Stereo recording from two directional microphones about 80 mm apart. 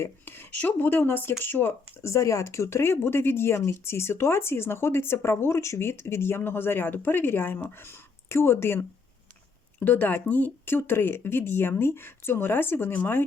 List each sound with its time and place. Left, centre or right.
0.0 s speech: left